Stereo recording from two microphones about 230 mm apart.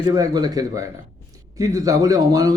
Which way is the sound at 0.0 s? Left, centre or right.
Centre.